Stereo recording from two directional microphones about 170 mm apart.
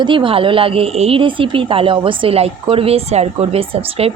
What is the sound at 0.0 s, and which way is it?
A woman's voice, 30° right (ahead or behind).